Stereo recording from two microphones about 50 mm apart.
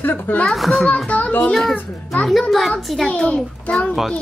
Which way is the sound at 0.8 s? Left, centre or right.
Left.